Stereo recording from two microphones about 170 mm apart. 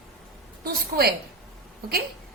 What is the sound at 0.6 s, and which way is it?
Speech, 65° right (ahead or behind).